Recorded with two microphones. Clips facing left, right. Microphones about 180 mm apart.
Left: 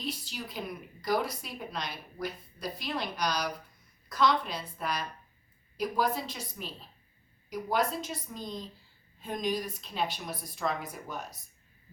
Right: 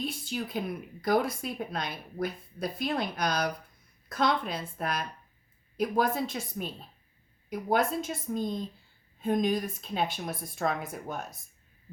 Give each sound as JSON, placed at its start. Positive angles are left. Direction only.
{"t": 0.0, "sound": "speech", "side_deg": -50}